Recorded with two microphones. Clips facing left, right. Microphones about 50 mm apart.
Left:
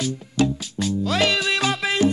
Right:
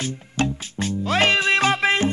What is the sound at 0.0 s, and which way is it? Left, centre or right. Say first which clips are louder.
Music: left 3 dB; right.